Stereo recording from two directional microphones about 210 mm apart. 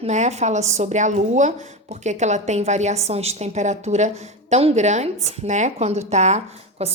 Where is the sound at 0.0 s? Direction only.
30° right (ahead or behind).